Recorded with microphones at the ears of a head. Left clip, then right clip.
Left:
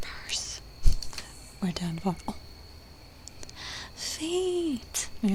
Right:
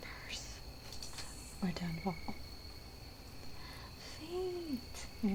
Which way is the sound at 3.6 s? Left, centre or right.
Left.